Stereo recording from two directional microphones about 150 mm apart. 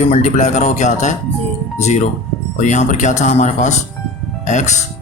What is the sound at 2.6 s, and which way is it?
Speech, 55° left (ahead or behind).